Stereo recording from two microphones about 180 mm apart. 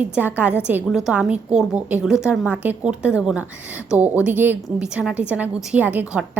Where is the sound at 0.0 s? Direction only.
10° right (ahead or behind).